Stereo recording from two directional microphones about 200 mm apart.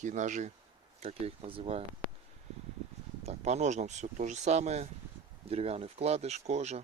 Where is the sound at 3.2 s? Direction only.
35° right (ahead or behind).